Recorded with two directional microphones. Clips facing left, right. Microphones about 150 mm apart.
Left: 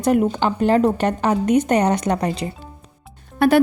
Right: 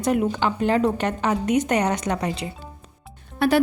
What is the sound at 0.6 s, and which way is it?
A woman's voice, 45° left (ahead or behind).